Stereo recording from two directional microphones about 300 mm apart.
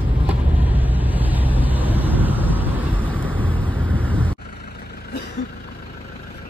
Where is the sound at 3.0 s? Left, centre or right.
Centre.